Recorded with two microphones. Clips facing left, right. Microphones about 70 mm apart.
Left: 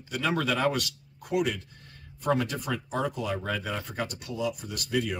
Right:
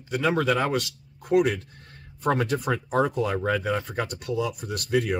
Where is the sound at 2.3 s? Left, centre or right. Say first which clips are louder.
Right 3 dB; right.